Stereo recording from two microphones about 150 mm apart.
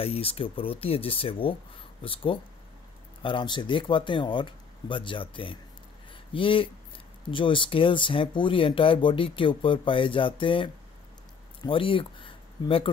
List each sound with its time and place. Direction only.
0.0 s speech: 40° left (ahead or behind)